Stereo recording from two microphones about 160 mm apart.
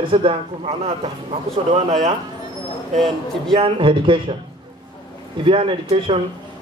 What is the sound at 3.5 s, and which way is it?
Speech, 35° right (ahead or behind).